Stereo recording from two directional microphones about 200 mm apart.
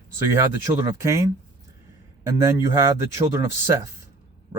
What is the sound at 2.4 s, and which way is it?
Speech, 15° right (ahead or behind).